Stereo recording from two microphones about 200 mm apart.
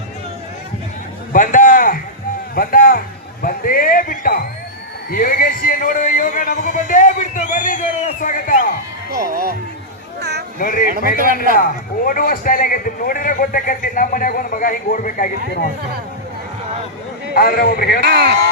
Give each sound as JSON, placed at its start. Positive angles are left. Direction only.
{"t": 1.3, "sound": "a sound", "side_deg": 40}
{"t": 2.6, "sound": "music", "side_deg": 45}
{"t": 5.1, "sound": "a man's voice", "side_deg": 45}
{"t": 9.0, "sound": "speech", "side_deg": -50}
{"t": 10.2, "sound": "a sound", "side_deg": -55}
{"t": 10.6, "sound": "a man's voice", "side_deg": 45}
{"t": 17.3, "sound": "a man's voice", "side_deg": 45}
{"t": 18.0, "sound": "speech", "side_deg": -55}